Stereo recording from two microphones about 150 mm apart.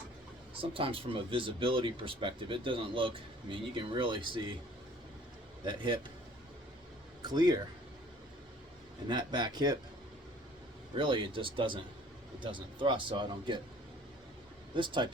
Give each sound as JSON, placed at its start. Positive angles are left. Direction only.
{"t": 0.5, "sound": "speech", "side_deg": -40}
{"t": 5.6, "sound": "speech", "side_deg": -30}
{"t": 7.2, "sound": "a man's voice", "side_deg": -30}
{"t": 9.0, "sound": "speech", "side_deg": -30}
{"t": 10.9, "sound": "speech", "side_deg": -35}
{"t": 14.8, "sound": "speech", "side_deg": -30}